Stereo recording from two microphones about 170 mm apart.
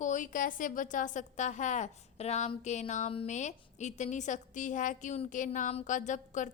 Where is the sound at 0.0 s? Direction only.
50° left (ahead or behind).